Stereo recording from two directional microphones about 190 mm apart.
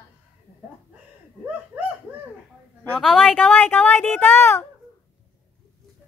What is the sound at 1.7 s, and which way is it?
Pigeon, 10° right (ahead or behind).